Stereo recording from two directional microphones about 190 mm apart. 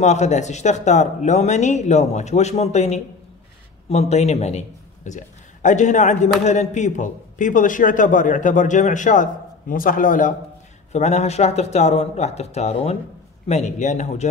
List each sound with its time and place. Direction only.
0.0 s a man's voice: 35° left (ahead or behind)